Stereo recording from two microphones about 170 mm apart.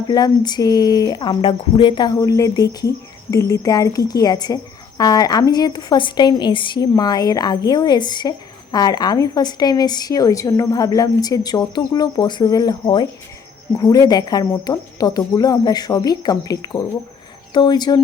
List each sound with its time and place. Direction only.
0.1 s speech: 25° left (ahead or behind)